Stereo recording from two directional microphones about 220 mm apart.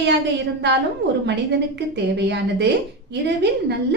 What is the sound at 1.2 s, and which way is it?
A woman's voice, 50° right (ahead or behind).